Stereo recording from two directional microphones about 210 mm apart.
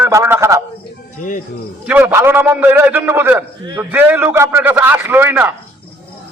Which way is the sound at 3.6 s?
20° right (ahead or behind).